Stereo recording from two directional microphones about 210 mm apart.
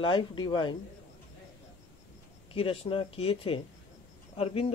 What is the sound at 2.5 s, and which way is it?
Speech, 25° left (ahead or behind).